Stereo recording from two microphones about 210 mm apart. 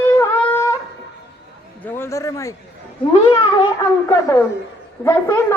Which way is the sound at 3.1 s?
25° left (ahead or behind).